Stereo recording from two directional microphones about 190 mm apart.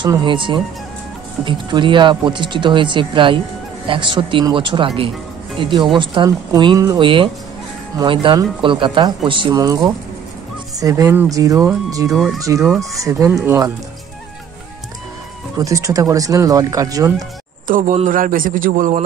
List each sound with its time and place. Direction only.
0.0 s speech: 25° right (ahead or behind)
12.1 s speech: centre (ahead or behind)
12.4 s speech: 15° right (ahead or behind)
12.6 s speech: centre (ahead or behind)
13.0 s speech: 15° right (ahead or behind)
15.6 s speech: 15° right (ahead or behind)
17.6 s a man's voice: 45° right (ahead or behind)